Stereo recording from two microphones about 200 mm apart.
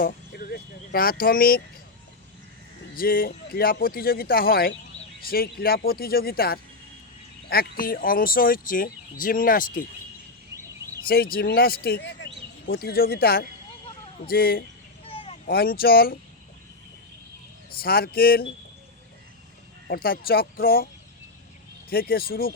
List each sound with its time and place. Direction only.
0.0 s a sound: 45° left (ahead or behind)
2.9 s speech: 45° left (ahead or behind)
11.3 s speech: 50° left (ahead or behind)
12.9 s speech: 50° left (ahead or behind)
15.0 s a sound: 30° left (ahead or behind)
15.4 s speech: 50° left (ahead or behind)
17.7 s speech: 50° left (ahead or behind)
19.9 s speech: 50° left (ahead or behind)